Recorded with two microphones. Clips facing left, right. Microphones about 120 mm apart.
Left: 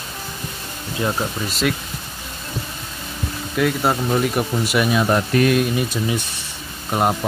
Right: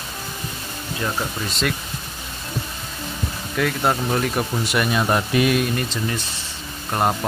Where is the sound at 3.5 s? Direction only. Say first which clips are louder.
Left 2 dB; 5° left (ahead or behind).